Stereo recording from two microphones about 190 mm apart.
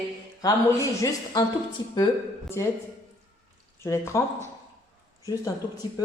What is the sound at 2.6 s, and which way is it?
Speech, 15° left (ahead or behind).